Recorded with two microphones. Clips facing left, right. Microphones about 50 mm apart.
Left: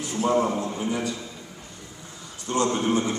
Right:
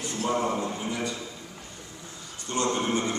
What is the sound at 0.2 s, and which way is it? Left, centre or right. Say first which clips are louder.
Speech: left 6 dB; left.